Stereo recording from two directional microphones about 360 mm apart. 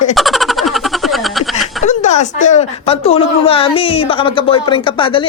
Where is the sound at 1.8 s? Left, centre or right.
Centre.